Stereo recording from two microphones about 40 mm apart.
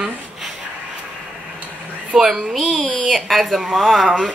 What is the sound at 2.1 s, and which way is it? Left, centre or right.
Speech, centre.